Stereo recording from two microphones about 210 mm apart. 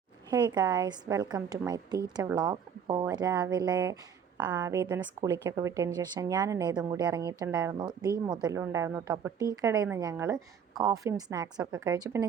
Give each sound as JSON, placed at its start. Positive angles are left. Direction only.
{"t": 0.3, "sound": "a woman's voice", "side_deg": -20}